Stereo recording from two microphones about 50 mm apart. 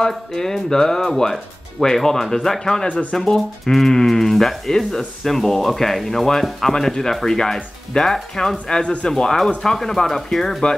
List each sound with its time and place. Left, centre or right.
0.1 s speech: centre
2.9 s speech: left
3.2 s speech: centre